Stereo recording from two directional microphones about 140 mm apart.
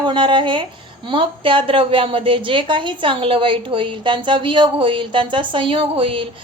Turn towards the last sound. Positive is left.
turn(degrees=-40)  # may be behind; listen again after turning